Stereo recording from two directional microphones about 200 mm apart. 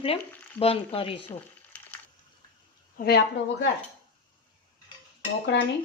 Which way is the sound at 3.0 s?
45° left (ahead or behind).